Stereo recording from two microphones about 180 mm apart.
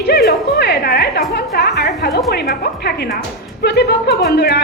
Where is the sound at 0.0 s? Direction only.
65° left (ahead or behind).